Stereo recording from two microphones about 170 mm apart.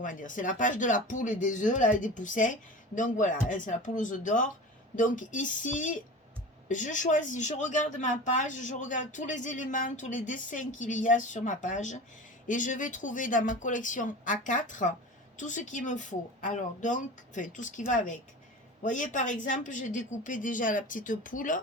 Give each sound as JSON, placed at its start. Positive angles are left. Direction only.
{"t": 0.0, "sound": "speech", "side_deg": 50}